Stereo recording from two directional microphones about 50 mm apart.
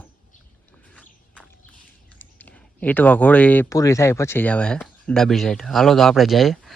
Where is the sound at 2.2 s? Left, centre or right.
Left.